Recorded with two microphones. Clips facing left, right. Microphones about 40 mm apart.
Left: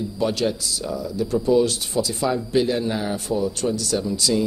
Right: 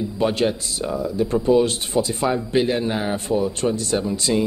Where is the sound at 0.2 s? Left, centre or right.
Right.